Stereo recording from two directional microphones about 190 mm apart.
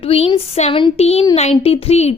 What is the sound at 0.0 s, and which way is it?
A woman's voice, 30° left (ahead or behind).